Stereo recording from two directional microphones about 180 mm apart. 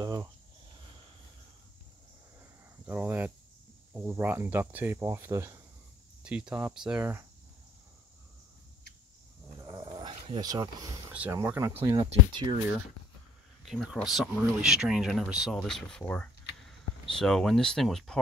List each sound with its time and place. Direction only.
0.0 s a sound: 20° right (ahead or behind)
2.8 s speech: 10° right (ahead or behind)
9.6 s dog: 20° right (ahead or behind)
11.1 s speech: 10° right (ahead or behind); by 12.5 s 25° right (ahead or behind)
13.7 s speech: centre (ahead or behind)